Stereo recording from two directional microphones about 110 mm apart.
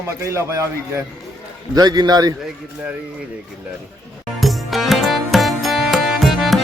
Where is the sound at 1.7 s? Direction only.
40° right (ahead or behind).